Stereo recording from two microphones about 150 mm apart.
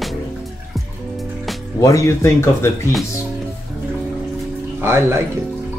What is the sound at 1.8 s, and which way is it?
Speech, 20° left (ahead or behind).